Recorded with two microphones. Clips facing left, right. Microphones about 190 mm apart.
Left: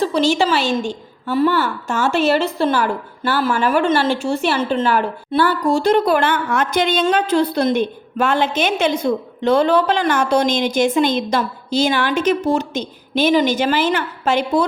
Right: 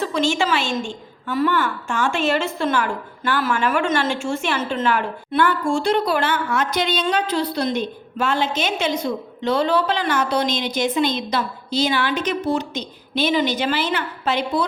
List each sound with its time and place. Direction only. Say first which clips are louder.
0.0 s a woman's voice: left 4 dB; 35° left (ahead or behind)